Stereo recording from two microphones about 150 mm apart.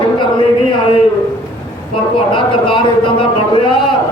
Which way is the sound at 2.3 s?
35° left (ahead or behind).